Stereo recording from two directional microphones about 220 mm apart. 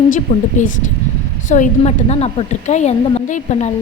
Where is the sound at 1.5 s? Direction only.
30° left (ahead or behind).